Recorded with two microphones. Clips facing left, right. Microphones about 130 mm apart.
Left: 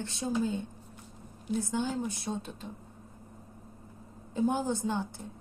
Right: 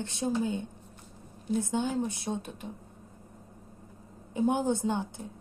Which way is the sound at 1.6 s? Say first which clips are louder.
Right 2 dB; 20° right (ahead or behind).